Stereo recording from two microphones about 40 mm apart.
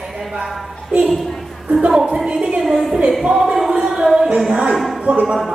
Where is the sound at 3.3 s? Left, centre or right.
Centre.